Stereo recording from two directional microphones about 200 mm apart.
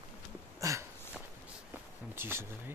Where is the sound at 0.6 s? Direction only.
15° right (ahead or behind).